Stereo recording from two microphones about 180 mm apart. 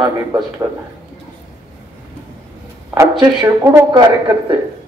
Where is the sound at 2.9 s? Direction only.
10° right (ahead or behind).